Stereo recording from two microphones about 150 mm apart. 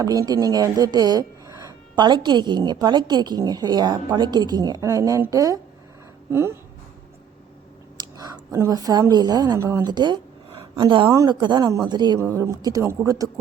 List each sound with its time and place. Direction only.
0.0 s speech: 25° right (ahead or behind)
7.9 s a woman's voice: 25° right (ahead or behind)
12.2 s speech: 20° right (ahead or behind)